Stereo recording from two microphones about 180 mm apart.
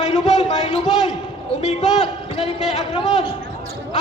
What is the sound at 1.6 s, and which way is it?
A man's voice, 40° left (ahead or behind).